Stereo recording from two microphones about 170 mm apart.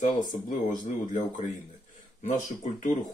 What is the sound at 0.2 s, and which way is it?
Speech, 50° left (ahead or behind).